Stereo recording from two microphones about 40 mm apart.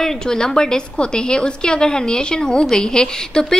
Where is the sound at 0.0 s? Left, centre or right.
Centre.